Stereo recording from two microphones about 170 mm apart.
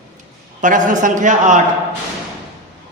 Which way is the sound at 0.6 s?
50° right (ahead or behind).